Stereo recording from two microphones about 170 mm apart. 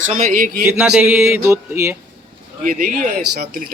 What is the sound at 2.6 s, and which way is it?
Speech, 50° right (ahead or behind).